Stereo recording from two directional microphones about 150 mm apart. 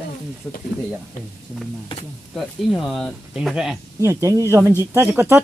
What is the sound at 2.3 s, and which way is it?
Speech, centre (ahead or behind).